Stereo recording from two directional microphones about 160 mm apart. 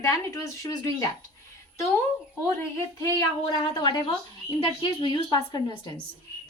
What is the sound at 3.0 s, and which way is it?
A woman's voice, 20° left (ahead or behind).